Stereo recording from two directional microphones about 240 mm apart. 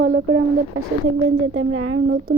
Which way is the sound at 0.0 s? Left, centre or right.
Right.